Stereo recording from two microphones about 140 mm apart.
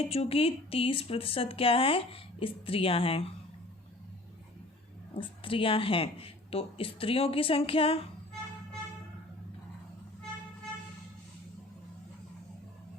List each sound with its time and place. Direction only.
0.1 s speech: 45° left (ahead or behind)
5.1 s speech: 40° left (ahead or behind)